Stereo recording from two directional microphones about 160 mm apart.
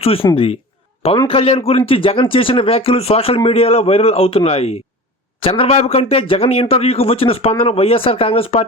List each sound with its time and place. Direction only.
0.0 s speech: 35° left (ahead or behind)